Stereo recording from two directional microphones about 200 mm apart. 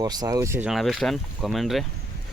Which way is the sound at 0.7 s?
Centre (ahead or behind).